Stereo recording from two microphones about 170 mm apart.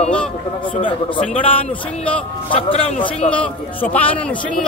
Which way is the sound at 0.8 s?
30° left (ahead or behind).